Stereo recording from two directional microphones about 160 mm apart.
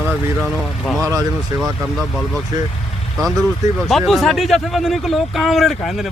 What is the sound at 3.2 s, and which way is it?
Speech, centre (ahead or behind).